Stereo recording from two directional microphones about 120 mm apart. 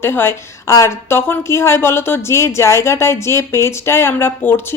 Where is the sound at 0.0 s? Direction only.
20° left (ahead or behind).